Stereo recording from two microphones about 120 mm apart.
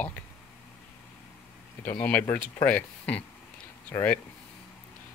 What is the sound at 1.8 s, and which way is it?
Speech, 15° left (ahead or behind).